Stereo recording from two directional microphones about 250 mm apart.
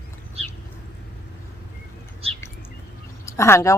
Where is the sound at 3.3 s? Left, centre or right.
Centre.